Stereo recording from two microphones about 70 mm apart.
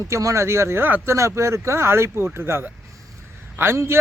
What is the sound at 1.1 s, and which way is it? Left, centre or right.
A man's voice, right.